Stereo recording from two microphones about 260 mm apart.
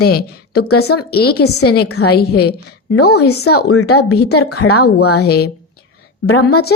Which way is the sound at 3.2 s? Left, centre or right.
Left.